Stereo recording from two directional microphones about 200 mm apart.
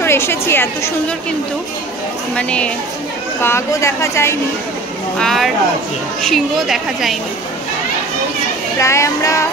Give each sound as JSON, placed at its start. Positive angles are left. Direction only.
{"t": 0.0, "sound": "speech", "side_deg": 10}
{"t": 2.3, "sound": "a woman's voice", "side_deg": 5}
{"t": 5.2, "sound": "a woman's voice", "side_deg": 0}
{"t": 8.7, "sound": "speech", "side_deg": 15}